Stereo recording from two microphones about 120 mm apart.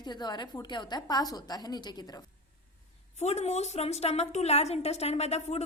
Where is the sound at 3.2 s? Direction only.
70° left (ahead or behind).